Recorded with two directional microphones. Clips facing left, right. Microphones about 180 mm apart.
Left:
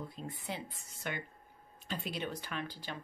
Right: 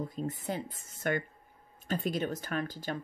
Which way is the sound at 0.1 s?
45° right (ahead or behind).